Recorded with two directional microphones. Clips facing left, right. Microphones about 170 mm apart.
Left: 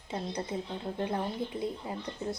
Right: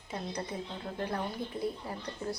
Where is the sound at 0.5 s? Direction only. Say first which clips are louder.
Left 3 dB; 25° left (ahead or behind).